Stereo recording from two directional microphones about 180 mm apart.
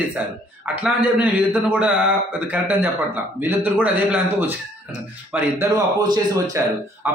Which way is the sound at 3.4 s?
10° right (ahead or behind).